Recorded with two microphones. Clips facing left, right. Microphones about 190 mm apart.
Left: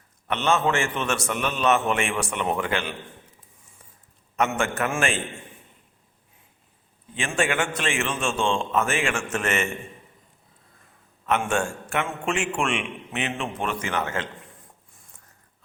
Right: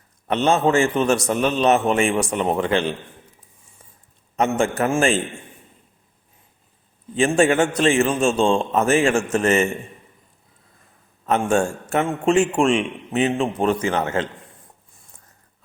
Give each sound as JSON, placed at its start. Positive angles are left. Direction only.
{"t": 0.3, "sound": "a man's voice", "side_deg": -35}
{"t": 4.4, "sound": "a man's voice", "side_deg": -35}
{"t": 7.1, "sound": "a man's voice", "side_deg": -40}
{"t": 11.3, "sound": "a man's voice", "side_deg": -35}